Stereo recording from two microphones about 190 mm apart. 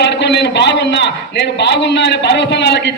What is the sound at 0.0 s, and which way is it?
A man's voice, 65° left (ahead or behind).